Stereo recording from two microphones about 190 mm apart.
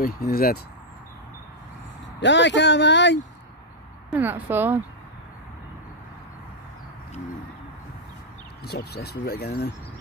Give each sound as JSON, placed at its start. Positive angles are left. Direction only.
{"t": 0.0, "sound": "speech", "side_deg": 50}
{"t": 2.1, "sound": "speech", "side_deg": 70}
{"t": 4.1, "sound": "speech", "side_deg": -10}
{"t": 8.6, "sound": "speech", "side_deg": 55}